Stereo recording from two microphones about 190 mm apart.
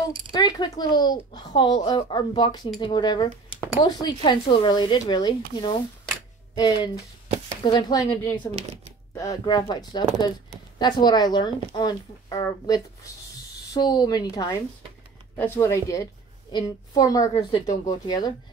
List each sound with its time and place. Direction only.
0.3 s a child's voice: 20° left (ahead or behind)
17.3 s a woman's voice: 35° left (ahead or behind)
17.8 s a child's voice: 20° left (ahead or behind)